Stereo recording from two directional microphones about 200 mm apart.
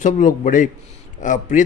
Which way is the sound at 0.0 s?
40° left (ahead or behind).